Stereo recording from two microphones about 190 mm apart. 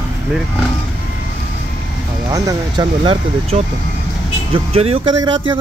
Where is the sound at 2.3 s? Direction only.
20° right (ahead or behind).